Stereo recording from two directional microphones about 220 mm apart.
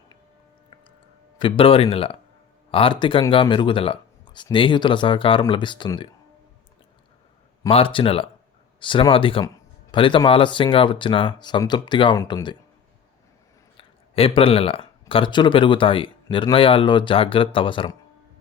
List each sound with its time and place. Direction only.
1.4 s speech: 25° left (ahead or behind)
7.7 s speech: 25° left (ahead or behind)
13.7 s speech: 25° left (ahead or behind)